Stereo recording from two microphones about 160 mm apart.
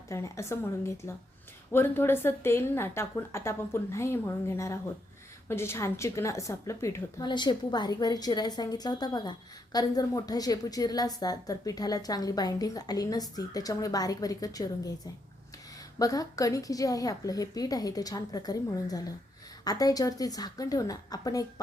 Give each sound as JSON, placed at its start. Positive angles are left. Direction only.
{"t": 0.1, "sound": "a woman's voice", "side_deg": 15}